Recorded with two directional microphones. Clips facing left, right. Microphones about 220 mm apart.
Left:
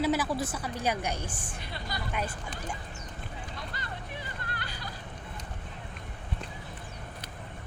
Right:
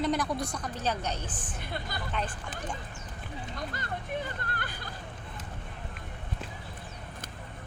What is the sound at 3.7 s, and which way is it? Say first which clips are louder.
Music: right 5 dB; 50° right (ahead or behind).